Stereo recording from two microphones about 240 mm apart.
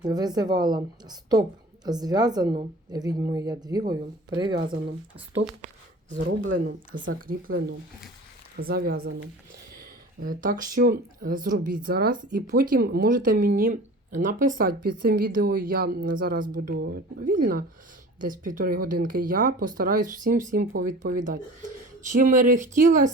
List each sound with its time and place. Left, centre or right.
0.0 s a woman's voice: centre
5.6 s a sound: right
6.4 s speech: right
6.7 s a woman's voice: right
7.2 s speech: right
8.6 s speech: right
9.0 s speech: right
10.2 s speech: right